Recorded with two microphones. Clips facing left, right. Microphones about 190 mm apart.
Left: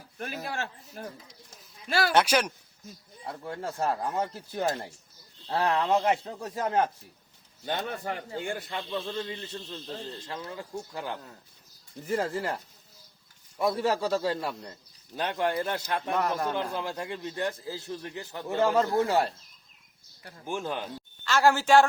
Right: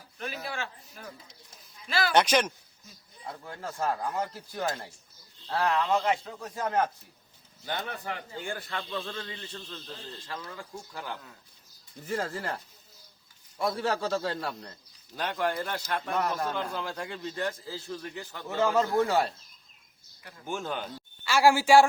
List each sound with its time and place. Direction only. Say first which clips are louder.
0.2 s speech: left 2 dB; 50° left (ahead or behind)
2.1 s a man's voice: right 1 dB; 5° left (ahead or behind)
3.4 s speech: left 2 dB; 25° left (ahead or behind)
6.1 s a man's voice: left 2 dB; 35° left (ahead or behind); by 12.5 s 15° left (ahead or behind)
13.6 s a man's voice: left 3 dB; 15° left (ahead or behind)
20.4 s speech: left 1 dB; 5° left (ahead or behind)
21.2 s a woman's voice: right 1 dB; 10° right (ahead or behind)